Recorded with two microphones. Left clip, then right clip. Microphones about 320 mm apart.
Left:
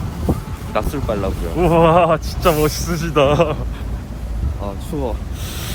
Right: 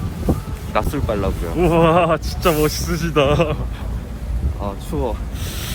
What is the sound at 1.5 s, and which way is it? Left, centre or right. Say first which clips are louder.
Speech: left 2 dB; centre.